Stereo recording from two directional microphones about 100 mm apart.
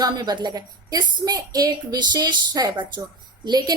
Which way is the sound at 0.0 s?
45° right (ahead or behind).